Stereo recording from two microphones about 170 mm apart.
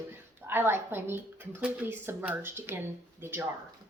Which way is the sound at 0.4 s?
15° right (ahead or behind).